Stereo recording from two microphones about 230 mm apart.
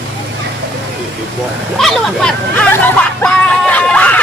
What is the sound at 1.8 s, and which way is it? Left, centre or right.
Hubbub, centre.